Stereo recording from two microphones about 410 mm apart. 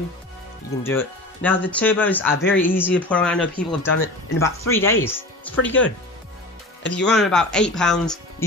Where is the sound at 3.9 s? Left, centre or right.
Left.